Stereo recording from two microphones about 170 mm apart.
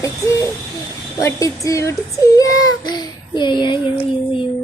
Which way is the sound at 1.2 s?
20° left (ahead or behind).